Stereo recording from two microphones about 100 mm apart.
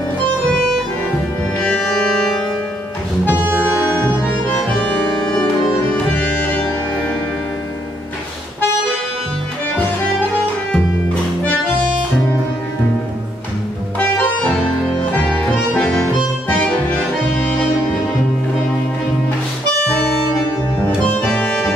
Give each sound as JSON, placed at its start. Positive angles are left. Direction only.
{"t": 3.3, "sound": "music", "side_deg": -20}
{"t": 4.2, "sound": "accordion", "side_deg": 15}
{"t": 6.1, "sound": "music", "side_deg": 10}
{"t": 13.9, "sound": "music", "side_deg": 15}
{"t": 16.4, "sound": "music", "side_deg": 15}
{"t": 21.0, "sound": "music", "side_deg": 15}